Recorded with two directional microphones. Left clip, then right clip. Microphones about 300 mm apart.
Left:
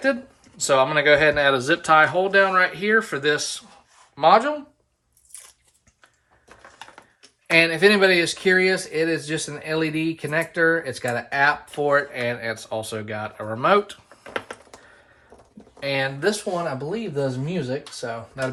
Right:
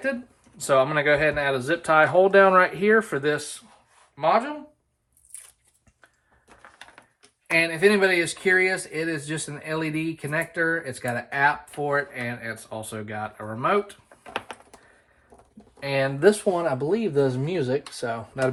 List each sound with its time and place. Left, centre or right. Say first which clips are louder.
0.5 s speech: left 2 dB; centre
4.1 s speech: left 6 dB; centre
7.5 s speech: left 4 dB; centre
15.8 s speech: left 1 dB; centre
16.2 s speech: right 4 dB; right